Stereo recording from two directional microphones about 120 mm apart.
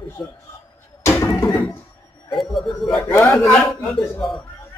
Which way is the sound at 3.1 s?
20° left (ahead or behind).